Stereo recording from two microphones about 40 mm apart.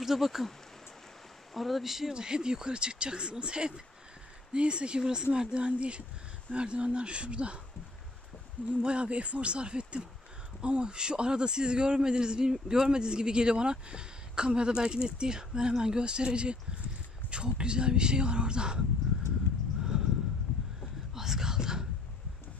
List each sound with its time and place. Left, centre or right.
0.0 s speech: centre
1.5 s speech: centre
2.1 s a man's voice: centre
8.6 s a man's voice: right
21.1 s whispering: centre